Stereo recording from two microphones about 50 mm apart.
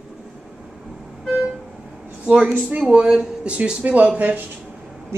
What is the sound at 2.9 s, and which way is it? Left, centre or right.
Speech, centre.